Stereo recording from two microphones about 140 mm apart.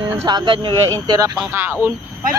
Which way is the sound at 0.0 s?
25° right (ahead or behind).